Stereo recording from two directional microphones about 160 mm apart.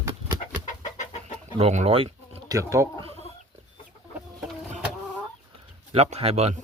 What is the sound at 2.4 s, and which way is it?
Speech, 20° right (ahead or behind).